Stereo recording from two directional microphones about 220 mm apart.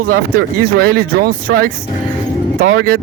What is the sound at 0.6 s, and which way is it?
Speech, 45° right (ahead or behind).